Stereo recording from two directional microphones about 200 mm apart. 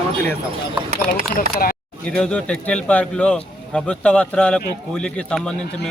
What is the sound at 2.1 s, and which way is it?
Speech, 5° left (ahead or behind).